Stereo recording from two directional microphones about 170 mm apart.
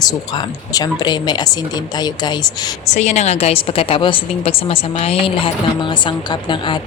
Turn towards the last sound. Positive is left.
turn(degrees=30)  # may be behind; listen again after turning